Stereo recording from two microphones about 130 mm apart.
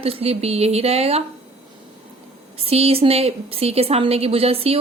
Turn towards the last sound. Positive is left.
turn(degrees=-50)  # may be behind; listen again after turning